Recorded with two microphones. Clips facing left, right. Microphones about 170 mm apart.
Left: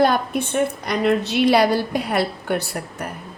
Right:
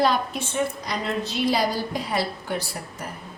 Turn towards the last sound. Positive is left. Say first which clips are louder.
# left 5 dB
turn(degrees=65)  # may be behind; listen again after turning